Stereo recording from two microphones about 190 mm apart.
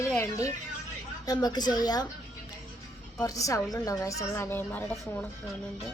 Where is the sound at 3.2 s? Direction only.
15° left (ahead or behind).